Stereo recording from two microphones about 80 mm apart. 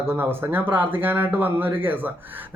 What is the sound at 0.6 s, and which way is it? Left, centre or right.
A man's voice, right.